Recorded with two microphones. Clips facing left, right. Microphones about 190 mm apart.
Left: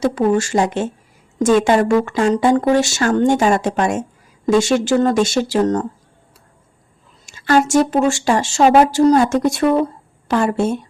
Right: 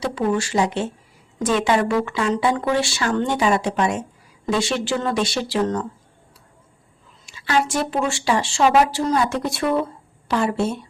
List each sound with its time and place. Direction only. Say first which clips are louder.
0.0 s speech: left 6 dB; 45° left (ahead or behind)
7.3 s speech: left 6 dB; 45° left (ahead or behind)